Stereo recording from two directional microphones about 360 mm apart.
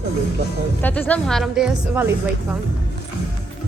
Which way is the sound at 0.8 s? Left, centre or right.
Centre.